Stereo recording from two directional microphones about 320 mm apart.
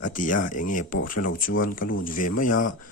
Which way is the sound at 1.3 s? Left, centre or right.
Left.